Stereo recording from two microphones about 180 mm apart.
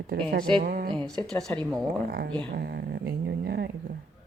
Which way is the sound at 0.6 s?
55° right (ahead or behind).